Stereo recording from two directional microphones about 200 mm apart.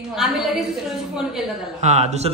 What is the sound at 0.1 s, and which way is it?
Speech, centre (ahead or behind).